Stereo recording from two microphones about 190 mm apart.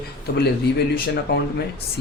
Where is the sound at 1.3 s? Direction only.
50° left (ahead or behind).